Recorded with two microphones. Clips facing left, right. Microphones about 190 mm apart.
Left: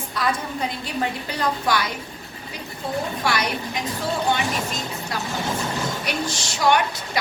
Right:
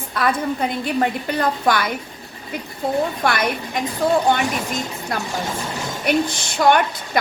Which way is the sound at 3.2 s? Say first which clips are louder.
Right 3 dB; 55° right (ahead or behind).